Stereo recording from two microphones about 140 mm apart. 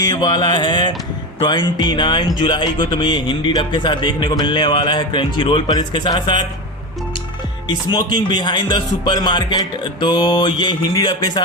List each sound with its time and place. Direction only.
0.0 s speech: 30° left (ahead or behind)
7.7 s speech: 30° left (ahead or behind)